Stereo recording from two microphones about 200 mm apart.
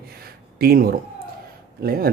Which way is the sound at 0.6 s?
50° right (ahead or behind).